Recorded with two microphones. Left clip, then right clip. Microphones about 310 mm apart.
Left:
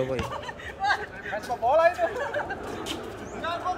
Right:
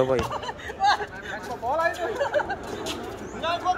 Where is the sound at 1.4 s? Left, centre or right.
Left.